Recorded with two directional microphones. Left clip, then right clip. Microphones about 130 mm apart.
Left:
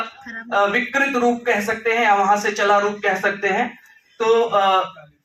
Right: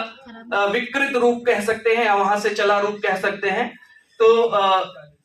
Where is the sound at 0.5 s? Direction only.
20° right (ahead or behind).